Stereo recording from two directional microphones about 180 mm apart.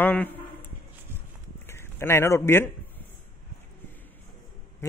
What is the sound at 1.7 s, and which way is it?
A man's voice, 15° left (ahead or behind).